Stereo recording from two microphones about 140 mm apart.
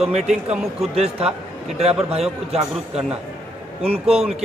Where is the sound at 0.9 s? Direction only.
50° right (ahead or behind).